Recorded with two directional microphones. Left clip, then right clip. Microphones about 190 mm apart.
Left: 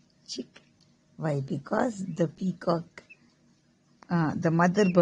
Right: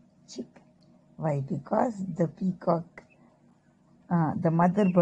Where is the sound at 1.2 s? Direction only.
20° left (ahead or behind).